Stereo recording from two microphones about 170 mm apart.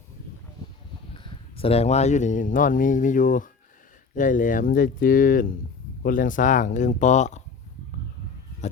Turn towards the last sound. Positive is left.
turn(degrees=45)  # may be behind; listen again after turning